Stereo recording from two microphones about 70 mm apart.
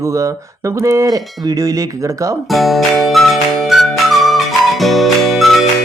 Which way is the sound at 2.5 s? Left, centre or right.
Centre.